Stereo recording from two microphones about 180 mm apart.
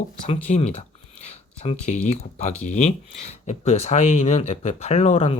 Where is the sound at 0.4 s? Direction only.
35° left (ahead or behind).